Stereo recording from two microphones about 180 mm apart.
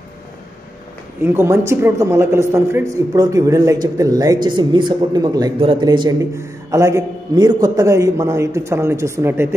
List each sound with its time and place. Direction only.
1.2 s a man's voice: 15° right (ahead or behind)